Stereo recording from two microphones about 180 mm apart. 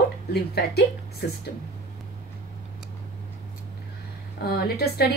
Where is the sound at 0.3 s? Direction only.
65° left (ahead or behind).